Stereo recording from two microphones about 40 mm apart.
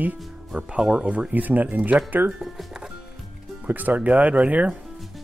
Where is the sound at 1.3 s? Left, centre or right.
Right.